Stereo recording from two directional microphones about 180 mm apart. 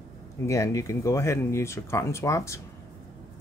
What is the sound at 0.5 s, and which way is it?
Speech, 15° left (ahead or behind).